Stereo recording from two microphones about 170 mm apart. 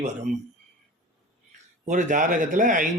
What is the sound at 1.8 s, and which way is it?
Speech, 45° right (ahead or behind).